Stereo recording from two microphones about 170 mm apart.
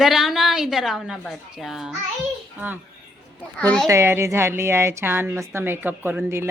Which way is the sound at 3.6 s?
5° left (ahead or behind).